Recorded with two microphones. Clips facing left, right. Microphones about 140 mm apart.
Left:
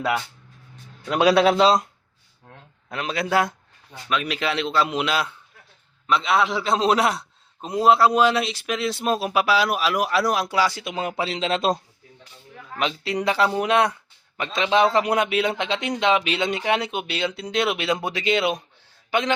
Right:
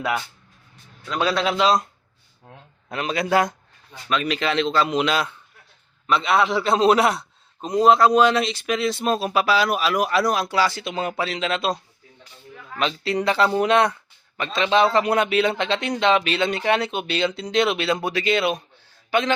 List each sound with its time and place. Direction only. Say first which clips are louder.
2.5 s a sound: right 1 dB; 20° right (ahead or behind)
2.9 s a man's voice: right 2 dB; centre (ahead or behind)
11.2 s speech: left 4 dB; 30° left (ahead or behind)
12.8 s speech: right 1 dB; 15° left (ahead or behind)